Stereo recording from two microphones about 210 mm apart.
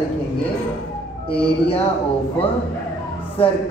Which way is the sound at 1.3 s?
25° left (ahead or behind).